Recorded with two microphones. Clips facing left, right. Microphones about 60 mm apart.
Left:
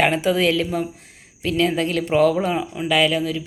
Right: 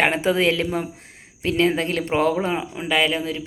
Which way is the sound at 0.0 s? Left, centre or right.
Right.